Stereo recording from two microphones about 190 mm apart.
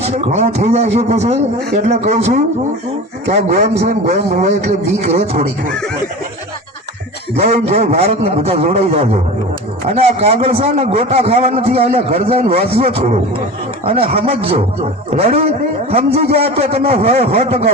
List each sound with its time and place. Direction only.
0.0 s a man's voice: 35° right (ahead or behind)
7.3 s a man's voice: 35° right (ahead or behind)